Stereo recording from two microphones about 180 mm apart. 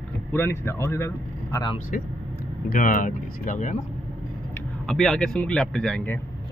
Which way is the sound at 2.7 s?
50° left (ahead or behind).